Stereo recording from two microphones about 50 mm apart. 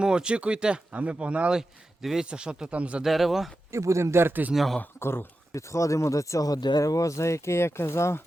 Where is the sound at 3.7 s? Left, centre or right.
Right.